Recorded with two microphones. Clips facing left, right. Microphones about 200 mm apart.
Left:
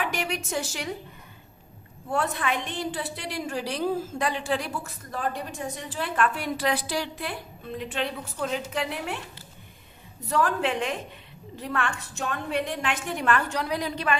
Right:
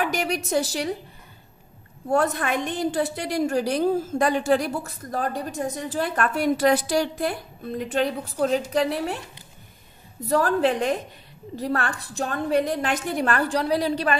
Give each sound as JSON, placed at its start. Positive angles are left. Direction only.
{"t": 0.0, "sound": "a woman's voice", "side_deg": -40}
{"t": 2.0, "sound": "a woman's voice", "side_deg": -40}
{"t": 10.2, "sound": "a woman's voice", "side_deg": -35}